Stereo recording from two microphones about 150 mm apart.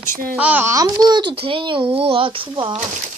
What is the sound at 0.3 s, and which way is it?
A child's voice, 10° right (ahead or behind).